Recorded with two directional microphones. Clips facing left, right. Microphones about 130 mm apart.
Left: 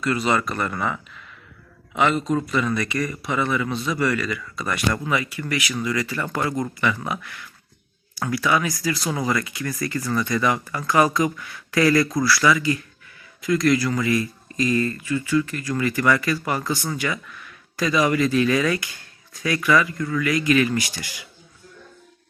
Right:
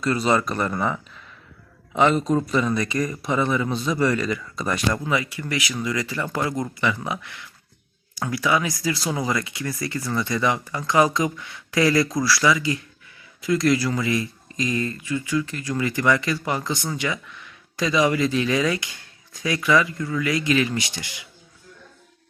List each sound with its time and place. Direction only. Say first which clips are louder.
0.3 s speech: right 1 dB; 15° right (ahead or behind)
2.3 s speech: right 1 dB; 20° right (ahead or behind)